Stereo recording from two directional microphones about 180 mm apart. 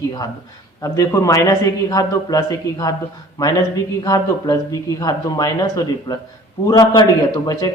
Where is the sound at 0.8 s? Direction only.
15° left (ahead or behind).